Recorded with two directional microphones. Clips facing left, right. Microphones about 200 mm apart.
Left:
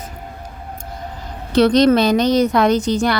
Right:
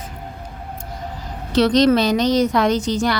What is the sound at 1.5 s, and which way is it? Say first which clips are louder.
A woman's voice: left 2 dB; 55° left (ahead or behind).